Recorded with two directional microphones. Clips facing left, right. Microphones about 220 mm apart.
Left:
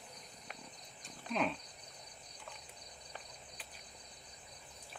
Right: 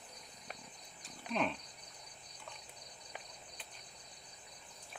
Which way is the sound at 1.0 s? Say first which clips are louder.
Even; centre (ahead or behind).